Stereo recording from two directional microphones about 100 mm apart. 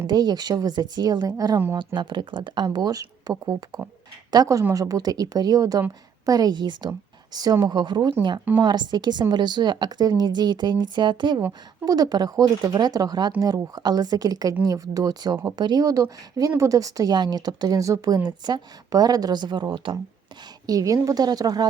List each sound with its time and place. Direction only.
0.1 s speech: 45° right (ahead or behind)
18.3 s speech: 45° right (ahead or behind)
20.7 s speech: 35° right (ahead or behind)